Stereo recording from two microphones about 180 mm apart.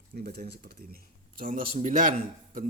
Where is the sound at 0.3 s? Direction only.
65° right (ahead or behind).